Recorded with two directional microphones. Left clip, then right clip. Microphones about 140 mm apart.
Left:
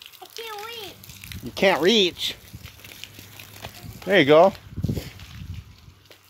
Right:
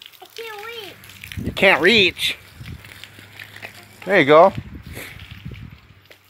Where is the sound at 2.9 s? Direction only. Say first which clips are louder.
Right 2 dB; 70° left (ahead or behind).